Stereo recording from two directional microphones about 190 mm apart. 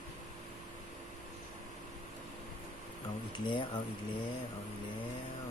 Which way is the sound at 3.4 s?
25° left (ahead or behind).